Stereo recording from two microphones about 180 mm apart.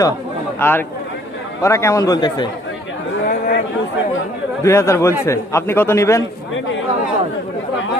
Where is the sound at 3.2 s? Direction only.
55° left (ahead or behind).